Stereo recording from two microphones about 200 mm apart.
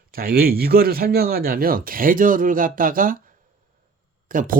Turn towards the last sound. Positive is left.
turn(degrees=-45)  # may be behind; listen again after turning